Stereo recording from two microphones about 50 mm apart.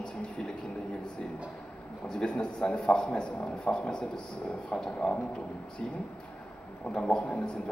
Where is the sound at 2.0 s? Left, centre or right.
Centre.